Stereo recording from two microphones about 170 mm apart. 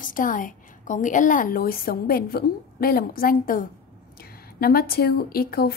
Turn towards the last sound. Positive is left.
turn(degrees=65)  # may be behind; listen again after turning